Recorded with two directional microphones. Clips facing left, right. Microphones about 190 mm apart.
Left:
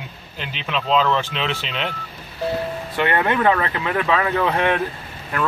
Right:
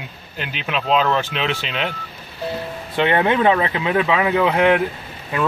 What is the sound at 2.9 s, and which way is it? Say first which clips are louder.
Speech: right 3 dB; 20° right (ahead or behind).